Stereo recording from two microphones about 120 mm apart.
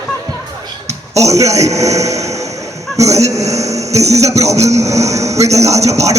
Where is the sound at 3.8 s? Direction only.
65° right (ahead or behind).